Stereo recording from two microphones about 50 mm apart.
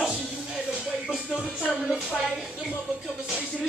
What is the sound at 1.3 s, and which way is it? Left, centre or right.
Music, centre.